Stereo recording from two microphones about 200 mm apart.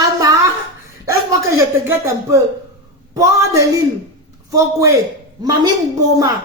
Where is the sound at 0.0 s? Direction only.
15° right (ahead or behind).